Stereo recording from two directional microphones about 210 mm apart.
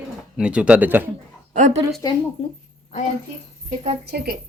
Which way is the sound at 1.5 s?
35° right (ahead or behind).